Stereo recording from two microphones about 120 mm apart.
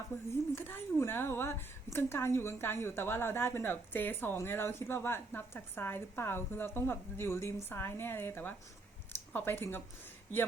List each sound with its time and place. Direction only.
0.1 s a woman's voice: 20° left (ahead or behind)